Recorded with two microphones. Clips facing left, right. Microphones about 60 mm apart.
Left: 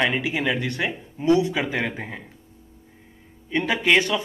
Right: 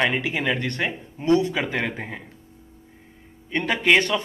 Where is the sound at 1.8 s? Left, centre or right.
Centre.